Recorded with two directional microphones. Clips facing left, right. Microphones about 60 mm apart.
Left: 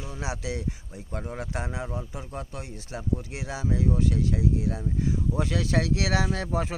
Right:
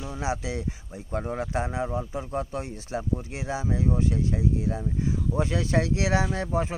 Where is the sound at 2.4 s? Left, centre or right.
Right.